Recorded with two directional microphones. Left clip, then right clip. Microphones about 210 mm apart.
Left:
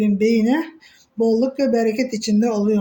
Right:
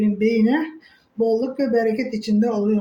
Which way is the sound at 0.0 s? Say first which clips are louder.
Left 1 dB; 50° left (ahead or behind).